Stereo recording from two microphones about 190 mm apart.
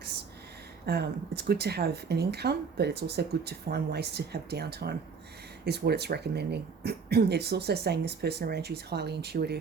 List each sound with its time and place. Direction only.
0.9 s speech: 60° right (ahead or behind)